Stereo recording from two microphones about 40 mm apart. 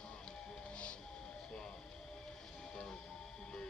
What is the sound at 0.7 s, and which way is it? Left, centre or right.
Music, left.